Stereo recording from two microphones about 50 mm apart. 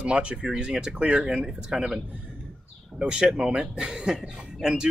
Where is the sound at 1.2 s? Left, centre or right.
Centre.